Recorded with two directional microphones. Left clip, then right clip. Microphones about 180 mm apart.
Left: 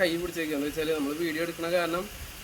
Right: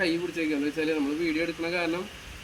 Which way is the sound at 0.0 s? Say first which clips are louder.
Even; 15° left (ahead or behind).